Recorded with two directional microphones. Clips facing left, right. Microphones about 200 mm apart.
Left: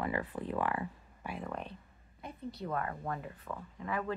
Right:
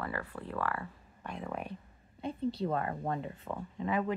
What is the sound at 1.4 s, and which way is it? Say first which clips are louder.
Speech: right 4 dB; 10° right (ahead or behind).